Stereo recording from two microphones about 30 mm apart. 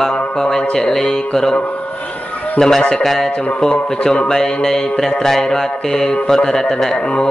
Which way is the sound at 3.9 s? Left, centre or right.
Left.